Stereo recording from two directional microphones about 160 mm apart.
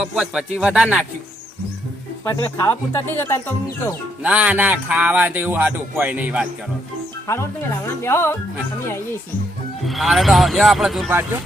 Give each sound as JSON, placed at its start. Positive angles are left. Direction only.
{"t": 0.0, "sound": "speech", "side_deg": -5}
{"t": 2.4, "sound": "speech", "side_deg": 15}
{"t": 4.2, "sound": "speech", "side_deg": -10}
{"t": 8.0, "sound": "speech", "side_deg": 15}
{"t": 9.8, "sound": "speech", "side_deg": 0}